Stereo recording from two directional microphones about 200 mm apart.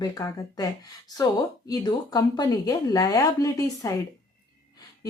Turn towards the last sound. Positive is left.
turn(degrees=15)  # may be behind; listen again after turning